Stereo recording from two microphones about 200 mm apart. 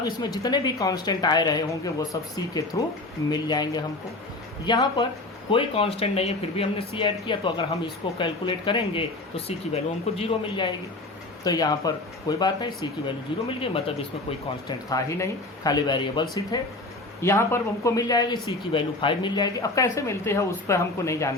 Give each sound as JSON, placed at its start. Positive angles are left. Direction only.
{"t": 0.0, "sound": "a woman's voice", "side_deg": 20}
{"t": 14.8, "sound": "a woman's voice", "side_deg": 15}